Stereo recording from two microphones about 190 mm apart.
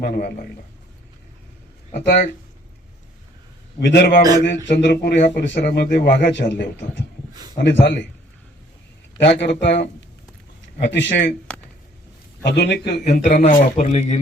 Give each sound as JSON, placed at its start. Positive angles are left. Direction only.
{"t": 0.0, "sound": "a man's voice", "side_deg": 55}
{"t": 1.9, "sound": "a man's voice", "side_deg": 55}
{"t": 3.8, "sound": "a man's voice", "side_deg": 60}
{"t": 4.4, "sound": "a man's voice", "side_deg": 65}
{"t": 9.2, "sound": "speech", "side_deg": 65}
{"t": 12.5, "sound": "a man's voice", "side_deg": 60}
{"t": 13.1, "sound": "speech", "side_deg": 45}